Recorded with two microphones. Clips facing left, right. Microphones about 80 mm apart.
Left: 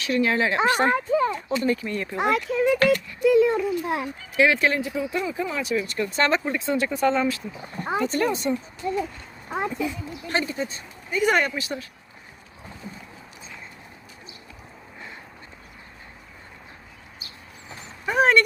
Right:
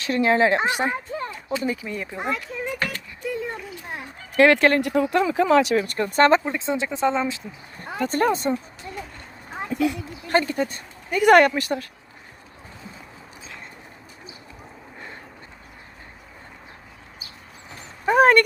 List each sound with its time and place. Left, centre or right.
0.0 s a woman's voice: right
0.9 s a sound: left
1.5 s speech: centre
2.1 s a child's voice: left
3.2 s a sound: left
4.4 s speech: right
5.3 s speech: right
6.0 s a woman's voice: right
6.4 s speech: right
8.0 s a woman's voice: right
9.5 s a sound: left
9.7 s speech: right
10.2 s speech: right
18.0 s a sound: right